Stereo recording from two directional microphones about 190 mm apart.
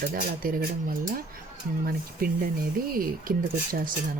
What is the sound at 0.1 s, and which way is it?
Speech, 50° right (ahead or behind).